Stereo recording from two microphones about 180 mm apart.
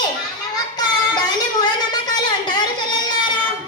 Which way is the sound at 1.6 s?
25° left (ahead or behind).